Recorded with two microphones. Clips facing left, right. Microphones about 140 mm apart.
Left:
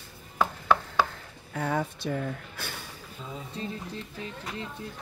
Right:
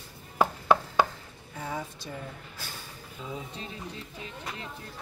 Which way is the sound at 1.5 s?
65° left (ahead or behind).